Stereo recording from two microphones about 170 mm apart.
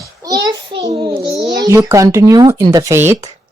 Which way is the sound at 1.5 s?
20° right (ahead or behind).